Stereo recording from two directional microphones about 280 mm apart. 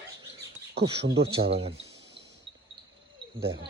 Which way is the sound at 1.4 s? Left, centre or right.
Right.